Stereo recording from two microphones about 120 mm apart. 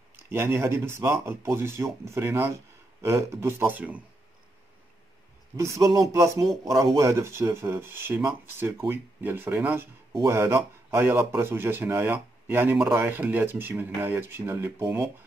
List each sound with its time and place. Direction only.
0.3 s speech: 20° right (ahead or behind)
5.6 s speech: 25° right (ahead or behind)